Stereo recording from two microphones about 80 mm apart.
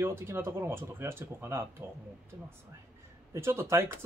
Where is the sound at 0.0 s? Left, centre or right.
Right.